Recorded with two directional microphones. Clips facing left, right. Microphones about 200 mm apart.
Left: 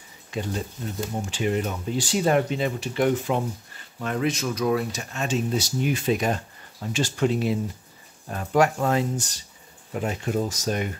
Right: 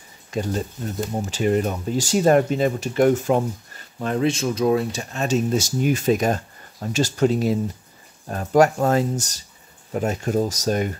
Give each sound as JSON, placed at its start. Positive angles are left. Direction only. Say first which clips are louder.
{"t": 0.3, "sound": "speech", "louder": "right 4 dB", "side_deg": -40}
{"t": 4.0, "sound": "speech", "louder": "right 4 dB", "side_deg": -30}